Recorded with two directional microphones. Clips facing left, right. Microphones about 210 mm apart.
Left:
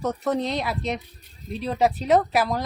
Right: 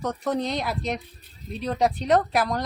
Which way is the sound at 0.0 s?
Centre (ahead or behind).